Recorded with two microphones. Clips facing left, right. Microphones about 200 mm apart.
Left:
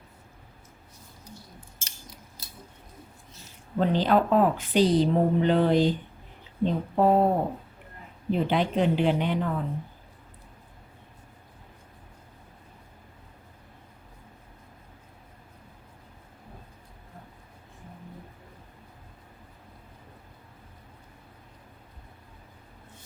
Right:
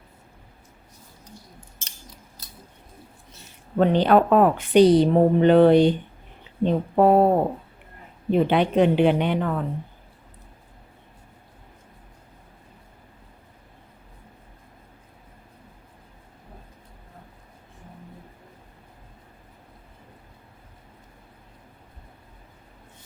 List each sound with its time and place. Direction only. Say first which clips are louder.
3.8 s a woman's voice: right 5 dB; 65° right (ahead or behind)
8.3 s a woman's voice: right 5 dB; 65° right (ahead or behind)